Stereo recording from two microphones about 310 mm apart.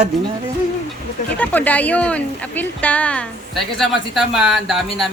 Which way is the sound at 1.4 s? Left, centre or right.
Centre.